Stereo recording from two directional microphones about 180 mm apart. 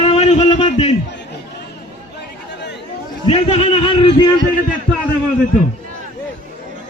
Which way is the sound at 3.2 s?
35° left (ahead or behind).